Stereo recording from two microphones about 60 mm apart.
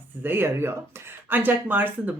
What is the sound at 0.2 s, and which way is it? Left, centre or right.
Speech, right.